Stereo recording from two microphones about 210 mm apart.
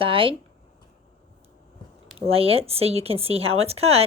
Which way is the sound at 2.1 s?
25° right (ahead or behind).